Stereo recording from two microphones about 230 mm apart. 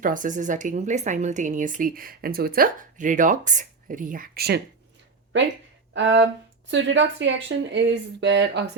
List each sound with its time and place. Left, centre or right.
0.0 s speech: right
5.9 s speech: right